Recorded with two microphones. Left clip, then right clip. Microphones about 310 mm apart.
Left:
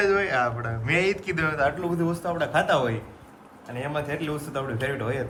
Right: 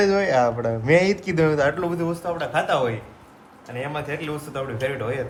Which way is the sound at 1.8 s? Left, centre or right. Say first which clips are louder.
Right 2 dB; centre.